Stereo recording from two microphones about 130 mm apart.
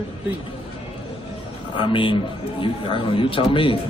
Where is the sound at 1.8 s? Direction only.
40° left (ahead or behind).